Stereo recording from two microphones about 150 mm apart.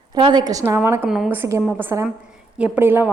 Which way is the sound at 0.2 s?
30° right (ahead or behind).